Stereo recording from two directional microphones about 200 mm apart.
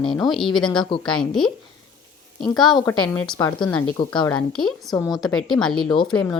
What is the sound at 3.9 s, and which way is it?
Speech, 20° left (ahead or behind).